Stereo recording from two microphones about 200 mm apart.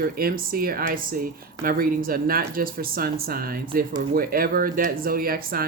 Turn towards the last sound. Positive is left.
turn(degrees=-50)  # may be behind; listen again after turning